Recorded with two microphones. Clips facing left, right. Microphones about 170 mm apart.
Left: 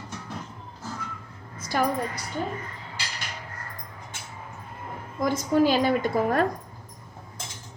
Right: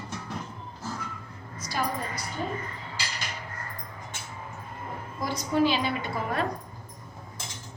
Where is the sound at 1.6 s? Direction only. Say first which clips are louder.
Left 5 dB; 55° left (ahead or behind).